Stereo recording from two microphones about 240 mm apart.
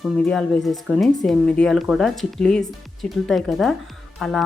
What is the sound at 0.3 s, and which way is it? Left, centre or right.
Speech, centre.